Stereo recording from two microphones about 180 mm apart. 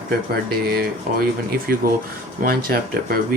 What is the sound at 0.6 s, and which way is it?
Speech, 60° right (ahead or behind).